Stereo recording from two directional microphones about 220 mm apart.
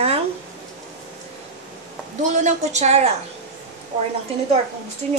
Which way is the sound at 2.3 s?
30° right (ahead or behind).